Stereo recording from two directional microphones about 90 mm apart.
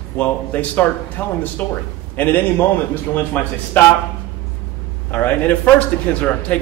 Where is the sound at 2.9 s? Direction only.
20° left (ahead or behind).